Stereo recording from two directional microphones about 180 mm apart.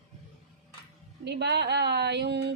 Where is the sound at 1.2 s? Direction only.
70° right (ahead or behind).